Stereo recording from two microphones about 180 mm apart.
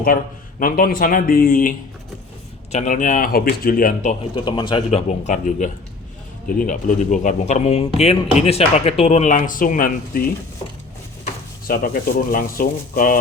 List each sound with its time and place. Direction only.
0.6 s speech: 55° left (ahead or behind)
2.7 s speech: 45° left (ahead or behind)
4.4 s speech: 25° left (ahead or behind); by 10.2 s 50° left (ahead or behind)
11.7 s speech: 55° left (ahead or behind)